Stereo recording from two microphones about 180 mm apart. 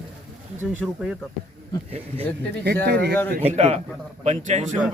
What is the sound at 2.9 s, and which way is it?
Speech, 65° right (ahead or behind).